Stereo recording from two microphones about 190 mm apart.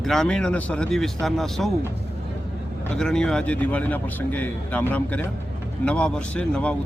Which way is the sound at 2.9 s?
5° left (ahead or behind).